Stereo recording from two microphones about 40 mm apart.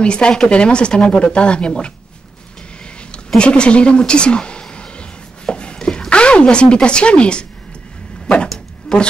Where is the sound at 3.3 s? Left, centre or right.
Left.